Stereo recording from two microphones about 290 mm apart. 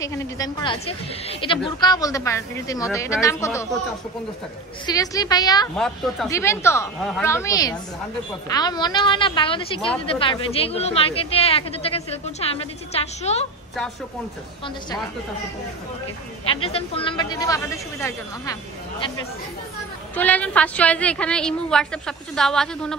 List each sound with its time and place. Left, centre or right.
0.0 s a woman's voice: centre
4.8 s a woman's voice: centre
16.4 s a woman's voice: centre